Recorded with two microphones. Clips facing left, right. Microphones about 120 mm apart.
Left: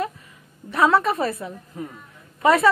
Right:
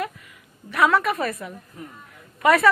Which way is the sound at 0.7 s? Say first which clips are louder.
Left 2 dB; 30° left (ahead or behind).